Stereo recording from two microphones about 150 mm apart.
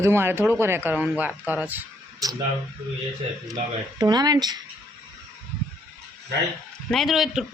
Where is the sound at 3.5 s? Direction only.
25° right (ahead or behind).